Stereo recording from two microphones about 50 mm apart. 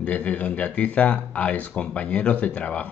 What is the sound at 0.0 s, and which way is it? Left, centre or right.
Speech, left.